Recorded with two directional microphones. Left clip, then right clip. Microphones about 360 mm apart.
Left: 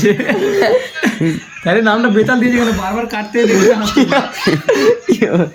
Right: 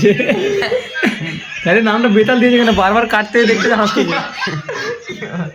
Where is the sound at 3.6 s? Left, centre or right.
Centre.